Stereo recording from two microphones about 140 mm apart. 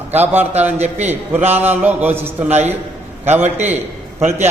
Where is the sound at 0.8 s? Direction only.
50° right (ahead or behind).